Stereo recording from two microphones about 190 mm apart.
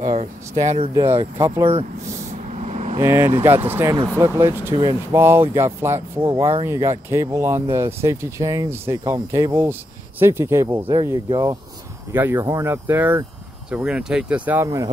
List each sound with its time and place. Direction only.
0.1 s speech: 35° right (ahead or behind)
1.0 s speech: 15° right (ahead or behind)
1.6 s speech: 30° right (ahead or behind)
2.5 s vehicle: 35° right (ahead or behind)
3.0 s speech: 15° right (ahead or behind)